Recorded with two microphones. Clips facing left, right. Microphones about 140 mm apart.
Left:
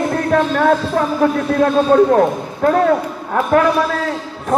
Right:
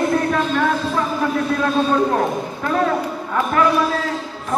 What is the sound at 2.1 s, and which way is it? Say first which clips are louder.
Speech: left 5 dB; 55° left (ahead or behind).